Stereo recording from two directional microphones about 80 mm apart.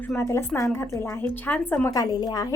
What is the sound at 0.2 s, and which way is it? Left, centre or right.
A woman's voice, left.